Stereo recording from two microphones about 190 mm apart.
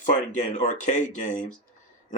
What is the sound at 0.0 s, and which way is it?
Speech, 40° left (ahead or behind).